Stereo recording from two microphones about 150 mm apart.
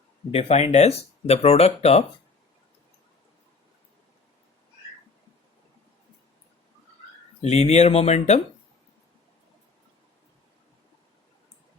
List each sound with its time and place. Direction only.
0.3 s speech: 45° left (ahead or behind)
7.4 s speech: 45° left (ahead or behind)